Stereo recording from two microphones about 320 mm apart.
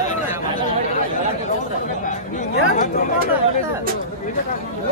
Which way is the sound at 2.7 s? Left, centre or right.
Left.